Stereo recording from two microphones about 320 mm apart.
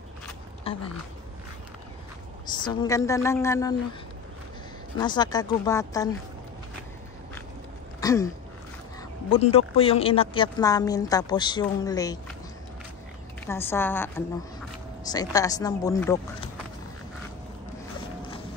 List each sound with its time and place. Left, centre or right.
0.7 s a sound: centre
2.5 s a woman's voice: centre
4.9 s speech: centre
8.0 s a sound: centre
9.3 s speech: centre
13.5 s a woman's voice: centre